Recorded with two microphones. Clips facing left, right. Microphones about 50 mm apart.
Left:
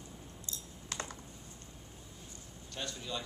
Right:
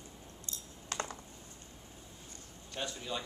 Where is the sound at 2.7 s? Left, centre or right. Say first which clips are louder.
Right 2 dB; centre.